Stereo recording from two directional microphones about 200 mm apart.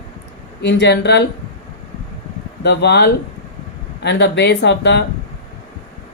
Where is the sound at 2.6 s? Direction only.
55° left (ahead or behind).